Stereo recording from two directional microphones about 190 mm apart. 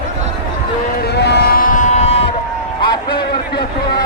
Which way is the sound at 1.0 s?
60° left (ahead or behind).